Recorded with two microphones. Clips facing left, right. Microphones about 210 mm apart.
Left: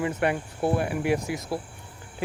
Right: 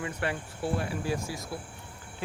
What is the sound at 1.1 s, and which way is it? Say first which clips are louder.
Speech: left 7 dB; 20° left (ahead or behind).